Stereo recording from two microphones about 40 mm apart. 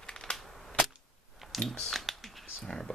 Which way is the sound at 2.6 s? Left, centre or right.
Centre.